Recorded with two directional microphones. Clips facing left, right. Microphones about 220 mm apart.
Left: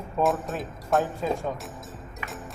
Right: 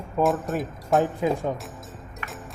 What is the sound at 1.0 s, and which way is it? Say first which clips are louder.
Speech: right 4 dB; 15° right (ahead or behind).